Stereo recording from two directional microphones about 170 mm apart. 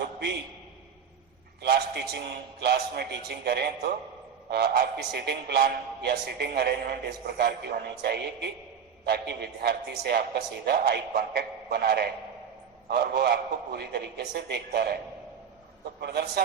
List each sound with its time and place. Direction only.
0.0 s a sound: 75° right (ahead or behind)
1.7 s a man's voice: 75° right (ahead or behind)
16.0 s a man's voice: 75° right (ahead or behind)